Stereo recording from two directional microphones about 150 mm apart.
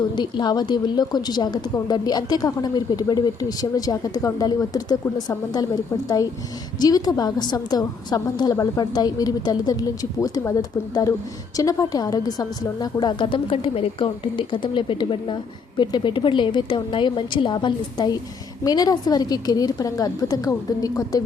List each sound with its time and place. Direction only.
0.2 s a woman's voice: 30° left (ahead or behind)
6.7 s a woman's voice: 25° left (ahead or behind)